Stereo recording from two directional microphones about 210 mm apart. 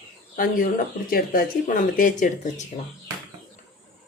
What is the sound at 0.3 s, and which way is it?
Speech, 40° left (ahead or behind).